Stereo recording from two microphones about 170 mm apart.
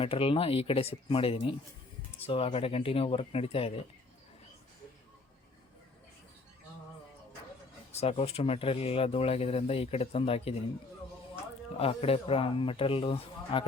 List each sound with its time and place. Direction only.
0.0 s speech: 35° left (ahead or behind)
7.9 s speech: 35° left (ahead or behind)
11.8 s speech: 35° left (ahead or behind)